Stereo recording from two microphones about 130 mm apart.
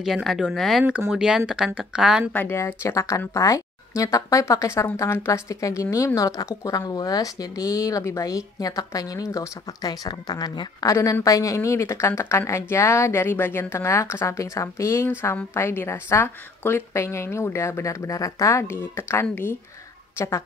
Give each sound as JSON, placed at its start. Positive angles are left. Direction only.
{"t": 0.0, "sound": "speech", "side_deg": 0}
{"t": 2.3, "sound": "speech", "side_deg": 20}